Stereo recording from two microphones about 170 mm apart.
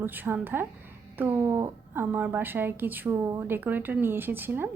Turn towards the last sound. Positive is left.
turn(degrees=-10)  # may be behind; listen again after turning